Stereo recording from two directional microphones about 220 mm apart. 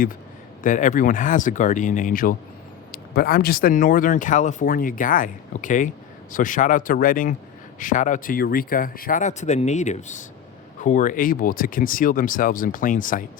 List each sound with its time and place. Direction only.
0.6 s speech: 35° left (ahead or behind)